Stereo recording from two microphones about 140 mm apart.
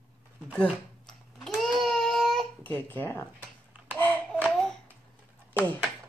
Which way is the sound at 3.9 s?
15° left (ahead or behind).